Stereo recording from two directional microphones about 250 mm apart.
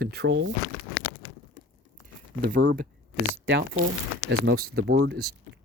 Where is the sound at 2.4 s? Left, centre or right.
Right.